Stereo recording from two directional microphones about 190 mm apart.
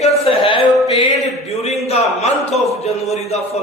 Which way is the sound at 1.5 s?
35° left (ahead or behind).